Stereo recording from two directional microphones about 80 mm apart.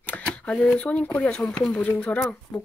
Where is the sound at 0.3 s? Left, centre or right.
Centre.